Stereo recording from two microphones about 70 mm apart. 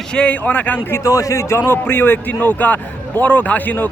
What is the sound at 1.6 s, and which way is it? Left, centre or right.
A man's voice, left.